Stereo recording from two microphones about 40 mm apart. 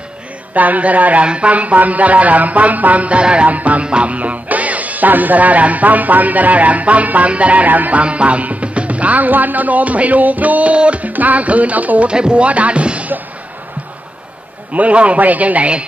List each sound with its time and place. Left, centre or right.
0.6 s speech: right
8.0 s speech: right
12.1 s speech: right
14.7 s speech: right